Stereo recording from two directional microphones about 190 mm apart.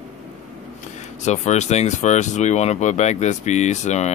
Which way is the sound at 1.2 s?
35° left (ahead or behind).